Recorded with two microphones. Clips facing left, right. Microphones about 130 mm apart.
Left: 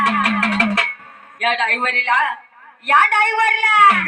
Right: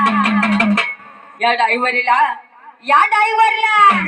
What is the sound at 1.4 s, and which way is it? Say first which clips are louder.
A woman's voice: right 5 dB; 35° right (ahead or behind).